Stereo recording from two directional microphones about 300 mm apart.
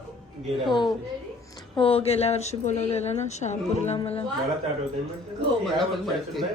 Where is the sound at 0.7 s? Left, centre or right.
Centre.